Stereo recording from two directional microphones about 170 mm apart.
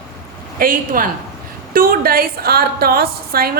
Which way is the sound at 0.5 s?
55° right (ahead or behind).